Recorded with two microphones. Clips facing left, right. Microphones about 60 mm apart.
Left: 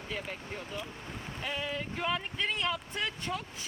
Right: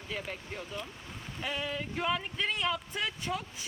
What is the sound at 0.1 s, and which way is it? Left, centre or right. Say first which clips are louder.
Speech: even; centre.